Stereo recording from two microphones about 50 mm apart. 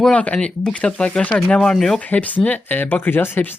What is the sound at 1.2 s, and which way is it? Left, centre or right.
Speech, left.